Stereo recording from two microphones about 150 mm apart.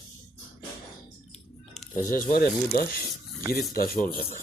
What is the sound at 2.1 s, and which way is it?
Speech, 70° left (ahead or behind).